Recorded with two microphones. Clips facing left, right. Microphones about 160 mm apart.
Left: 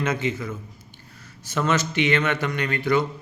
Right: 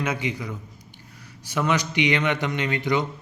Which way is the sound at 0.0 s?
10° right (ahead or behind).